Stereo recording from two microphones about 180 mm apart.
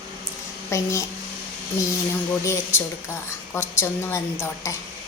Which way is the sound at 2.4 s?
15° left (ahead or behind).